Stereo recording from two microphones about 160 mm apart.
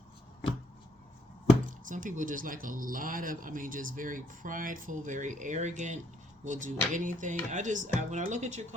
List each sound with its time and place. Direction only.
1.9 s speech: 55° right (ahead or behind)